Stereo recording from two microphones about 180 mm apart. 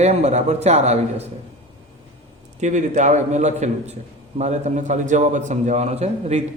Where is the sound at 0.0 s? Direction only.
35° right (ahead or behind).